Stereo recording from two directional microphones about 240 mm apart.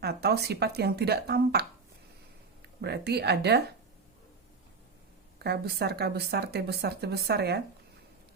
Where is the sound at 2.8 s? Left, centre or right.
Right.